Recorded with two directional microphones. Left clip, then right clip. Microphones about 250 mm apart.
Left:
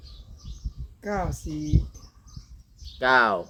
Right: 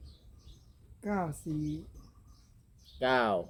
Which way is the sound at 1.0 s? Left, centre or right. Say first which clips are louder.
Left 6 dB; right.